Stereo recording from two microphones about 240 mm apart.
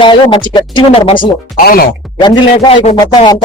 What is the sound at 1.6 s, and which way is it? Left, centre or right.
Speech, left.